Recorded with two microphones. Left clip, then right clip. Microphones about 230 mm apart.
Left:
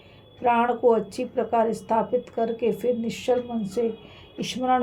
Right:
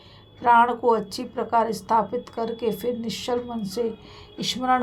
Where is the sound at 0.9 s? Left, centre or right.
Right.